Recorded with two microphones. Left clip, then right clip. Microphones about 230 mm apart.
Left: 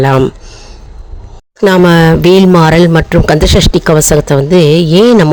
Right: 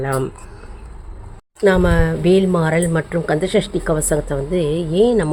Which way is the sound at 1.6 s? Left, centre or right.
Left.